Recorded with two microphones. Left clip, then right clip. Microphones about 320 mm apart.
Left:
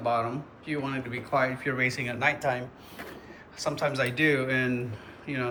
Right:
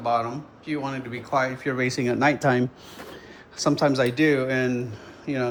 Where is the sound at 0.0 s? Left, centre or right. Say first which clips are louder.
Right 3 dB; centre.